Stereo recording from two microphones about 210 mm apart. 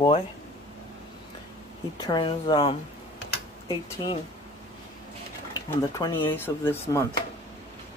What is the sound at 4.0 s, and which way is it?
Speech, 20° left (ahead or behind).